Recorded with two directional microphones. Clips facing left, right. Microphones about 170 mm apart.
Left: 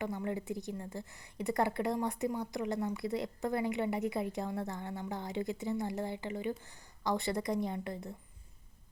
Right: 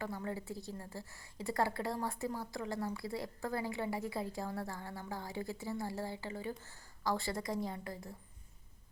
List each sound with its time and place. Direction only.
0.0 s a woman's voice: 20° left (ahead or behind)